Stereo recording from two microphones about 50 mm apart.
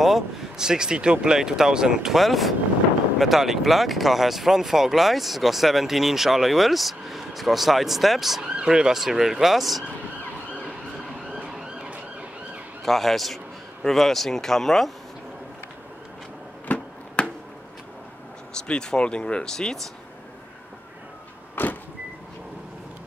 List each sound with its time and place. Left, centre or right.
0.0 s speech: centre
2.1 s speech: centre
8.5 s speech: centre
11.5 s music: centre
12.8 s speech: centre
16.7 s a sound: left
18.7 s speech: centre
21.6 s vehicle: left